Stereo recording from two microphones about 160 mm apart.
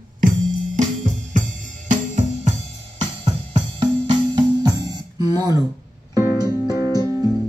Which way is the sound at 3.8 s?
30° right (ahead or behind).